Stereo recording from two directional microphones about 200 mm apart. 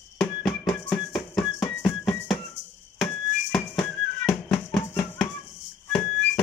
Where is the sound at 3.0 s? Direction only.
Centre (ahead or behind).